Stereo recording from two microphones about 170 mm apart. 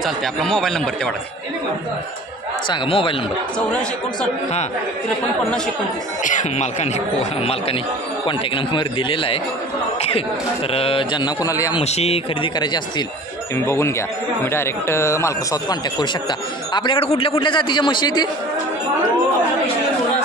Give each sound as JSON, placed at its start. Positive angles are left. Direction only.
{"t": 0.0, "sound": "speech", "side_deg": 0}
{"t": 2.7, "sound": "a man's voice", "side_deg": 30}
{"t": 6.2, "sound": "a man's voice", "side_deg": 45}
{"t": 10.7, "sound": "speech", "side_deg": 35}
{"t": 11.8, "sound": "a man's voice", "side_deg": 40}
{"t": 13.6, "sound": "speech", "side_deg": 15}